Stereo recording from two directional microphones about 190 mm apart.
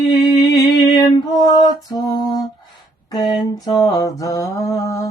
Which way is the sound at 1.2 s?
20° left (ahead or behind).